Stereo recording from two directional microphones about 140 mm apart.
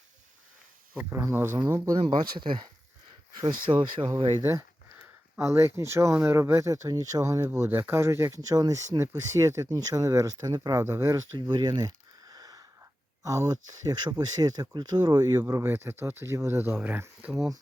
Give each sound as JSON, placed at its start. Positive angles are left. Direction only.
{"t": 0.9, "sound": "speech", "side_deg": -15}
{"t": 2.0, "sound": "speech", "side_deg": -35}
{"t": 5.4, "sound": "speech", "side_deg": -20}
{"t": 15.4, "sound": "speech", "side_deg": -20}